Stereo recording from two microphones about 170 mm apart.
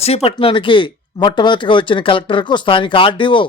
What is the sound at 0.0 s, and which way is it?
Speech, 35° left (ahead or behind).